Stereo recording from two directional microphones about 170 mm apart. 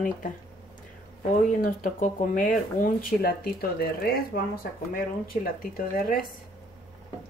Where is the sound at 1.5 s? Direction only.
55° left (ahead or behind).